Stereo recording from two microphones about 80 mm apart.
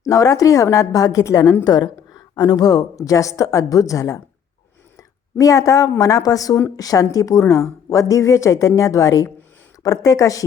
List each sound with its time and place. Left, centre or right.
0.0 s a woman's voice: left
4.9 s a sound: left
6.0 s a woman's voice: left